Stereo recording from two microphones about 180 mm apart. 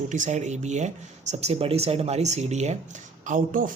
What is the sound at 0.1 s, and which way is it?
Speech, 40° right (ahead or behind).